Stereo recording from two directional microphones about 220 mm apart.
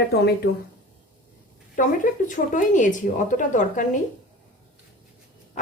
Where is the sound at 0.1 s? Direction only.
45° left (ahead or behind).